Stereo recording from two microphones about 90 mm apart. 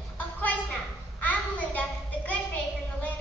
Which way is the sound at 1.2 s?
20° left (ahead or behind).